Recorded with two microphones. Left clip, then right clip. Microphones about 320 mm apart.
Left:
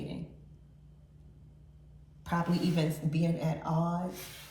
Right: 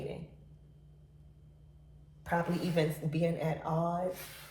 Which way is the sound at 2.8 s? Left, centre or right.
Centre.